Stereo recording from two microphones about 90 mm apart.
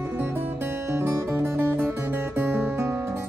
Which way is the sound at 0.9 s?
25° right (ahead or behind).